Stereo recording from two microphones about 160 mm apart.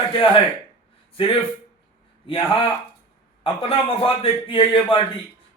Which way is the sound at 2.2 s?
35° left (ahead or behind).